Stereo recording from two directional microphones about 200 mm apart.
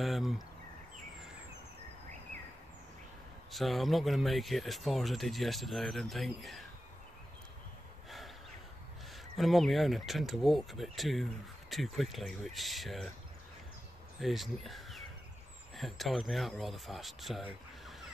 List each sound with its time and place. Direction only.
0.0 s speech: centre (ahead or behind)
3.5 s speech: centre (ahead or behind)
9.4 s speech: centre (ahead or behind)
14.2 s speech: centre (ahead or behind)